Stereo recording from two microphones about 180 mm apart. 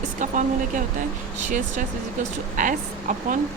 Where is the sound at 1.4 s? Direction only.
45° right (ahead or behind).